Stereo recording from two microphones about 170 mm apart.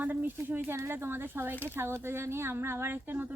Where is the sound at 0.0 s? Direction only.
10° right (ahead or behind).